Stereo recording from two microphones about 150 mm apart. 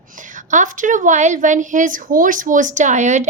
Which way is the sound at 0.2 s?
60° right (ahead or behind).